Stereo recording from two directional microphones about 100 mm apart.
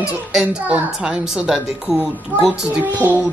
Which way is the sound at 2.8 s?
15° right (ahead or behind).